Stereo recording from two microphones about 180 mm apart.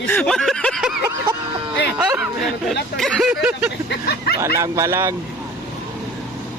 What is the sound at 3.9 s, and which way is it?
Speech, 60° left (ahead or behind).